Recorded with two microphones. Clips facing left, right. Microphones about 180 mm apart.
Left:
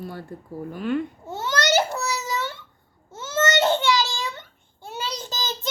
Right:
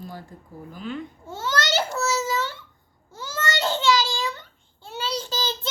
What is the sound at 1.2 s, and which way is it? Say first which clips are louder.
Babbling: left 2 dB; 20° left (ahead or behind).